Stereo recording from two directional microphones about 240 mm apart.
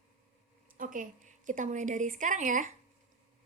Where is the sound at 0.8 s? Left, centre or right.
Right.